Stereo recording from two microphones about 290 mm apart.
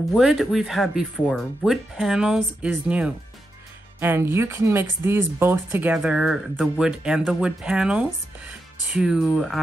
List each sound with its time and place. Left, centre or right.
0.1 s speech: centre